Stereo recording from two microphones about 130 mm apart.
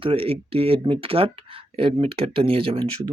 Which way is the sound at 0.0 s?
45° right (ahead or behind).